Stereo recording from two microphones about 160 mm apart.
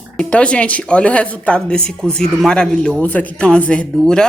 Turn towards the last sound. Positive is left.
turn(degrees=5)  # may be behind; listen again after turning